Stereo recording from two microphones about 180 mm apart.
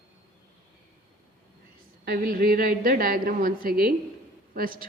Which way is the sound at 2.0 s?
55° right (ahead or behind).